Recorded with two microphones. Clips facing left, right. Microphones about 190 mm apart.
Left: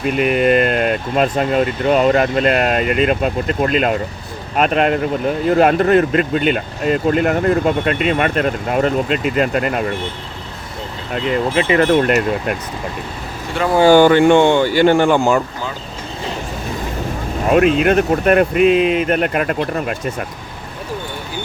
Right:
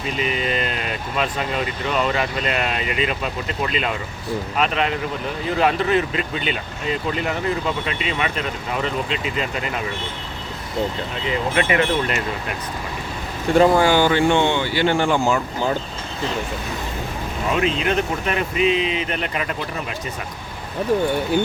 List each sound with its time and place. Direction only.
0.0 s speech: 60° left (ahead or behind)
11.8 s speech: 55° left (ahead or behind)
13.8 s speech: 50° left (ahead or behind)
17.4 s speech: 55° left (ahead or behind)